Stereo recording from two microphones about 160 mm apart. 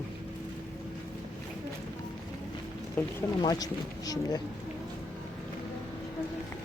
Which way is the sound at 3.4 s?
25° left (ahead or behind).